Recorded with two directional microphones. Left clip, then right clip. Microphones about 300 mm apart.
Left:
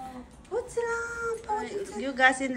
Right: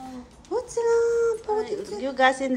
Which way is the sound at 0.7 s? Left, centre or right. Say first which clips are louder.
Right 12 dB; centre.